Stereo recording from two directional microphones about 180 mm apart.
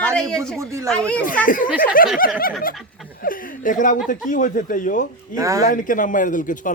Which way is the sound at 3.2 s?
50° left (ahead or behind).